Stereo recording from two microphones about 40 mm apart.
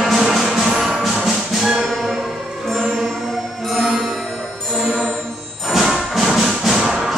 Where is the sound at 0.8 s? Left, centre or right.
Centre.